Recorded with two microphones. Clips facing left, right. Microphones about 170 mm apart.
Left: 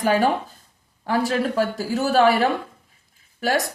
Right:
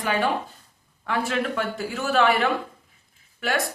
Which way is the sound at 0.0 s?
40° left (ahead or behind).